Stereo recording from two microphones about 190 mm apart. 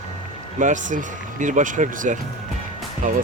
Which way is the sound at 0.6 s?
40° right (ahead or behind).